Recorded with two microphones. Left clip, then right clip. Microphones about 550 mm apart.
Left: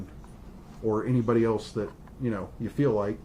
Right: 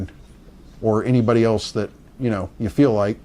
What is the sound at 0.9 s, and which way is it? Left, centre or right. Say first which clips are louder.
Speech: right 8 dB; right.